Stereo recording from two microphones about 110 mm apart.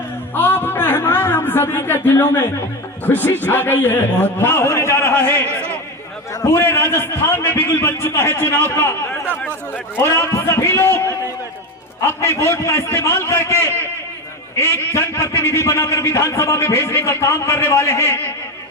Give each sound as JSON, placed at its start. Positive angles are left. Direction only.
{"t": 0.3, "sound": "a sound", "side_deg": 20}
{"t": 3.1, "sound": "a man's voice", "side_deg": 15}
{"t": 10.0, "sound": "a man's voice", "side_deg": 25}
{"t": 12.4, "sound": "a man's voice", "side_deg": 25}